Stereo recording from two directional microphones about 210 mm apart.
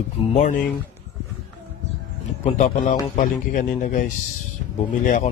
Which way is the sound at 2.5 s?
35° left (ahead or behind).